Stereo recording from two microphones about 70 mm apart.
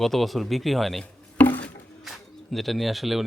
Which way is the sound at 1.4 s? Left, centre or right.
Left.